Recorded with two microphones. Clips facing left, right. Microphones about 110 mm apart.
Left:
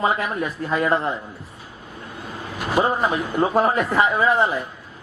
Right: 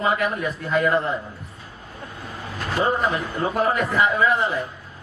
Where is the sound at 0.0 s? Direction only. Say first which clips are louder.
Even; 30° left (ahead or behind).